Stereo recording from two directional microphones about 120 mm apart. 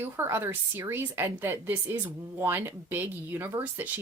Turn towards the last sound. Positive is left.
turn(degrees=-15)  # may be behind; listen again after turning